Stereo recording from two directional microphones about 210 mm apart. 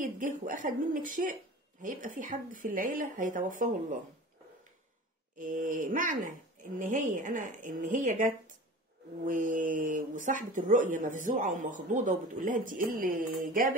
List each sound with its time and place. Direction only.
0.0 s speech: 40° right (ahead or behind)
5.4 s speech: 40° right (ahead or behind)